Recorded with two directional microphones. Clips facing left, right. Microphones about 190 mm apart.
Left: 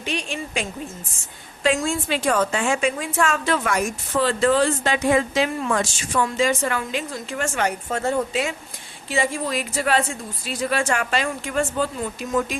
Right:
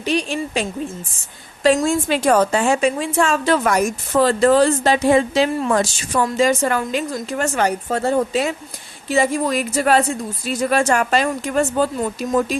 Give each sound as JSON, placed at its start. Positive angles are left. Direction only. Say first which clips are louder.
{"t": 0.0, "sound": "a woman's voice", "louder": "right 7 dB", "side_deg": -35}